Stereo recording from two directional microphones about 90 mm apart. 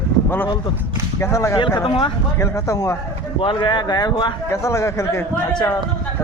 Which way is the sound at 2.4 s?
35° left (ahead or behind).